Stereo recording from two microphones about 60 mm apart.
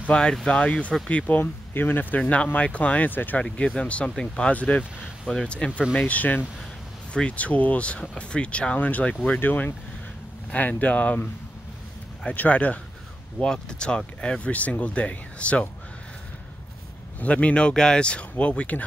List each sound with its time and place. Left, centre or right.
0.1 s speech: centre
1.4 s speech: left
3.5 s speech: centre
4.5 s speech: left
5.3 s speech: centre
5.9 s speech: left
12.3 s speech: left
13.4 s speech: centre
17.2 s speech: left